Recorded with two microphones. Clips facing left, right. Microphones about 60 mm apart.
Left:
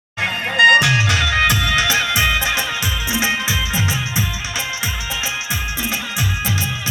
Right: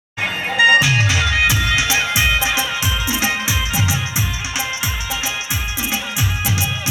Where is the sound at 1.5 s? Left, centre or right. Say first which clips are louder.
Left 1 dB; left.